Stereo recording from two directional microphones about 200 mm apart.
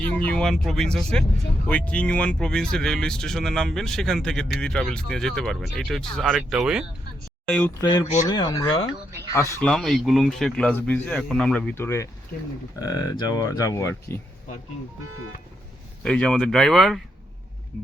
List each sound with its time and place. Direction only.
0.0 s speech: 5° left (ahead or behind)
7.8 s speech: 20° left (ahead or behind)
9.3 s speech: 10° left (ahead or behind)
16.0 s speech: 5° left (ahead or behind)